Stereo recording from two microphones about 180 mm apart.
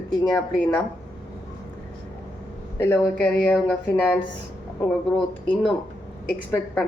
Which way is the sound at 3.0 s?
Centre (ahead or behind).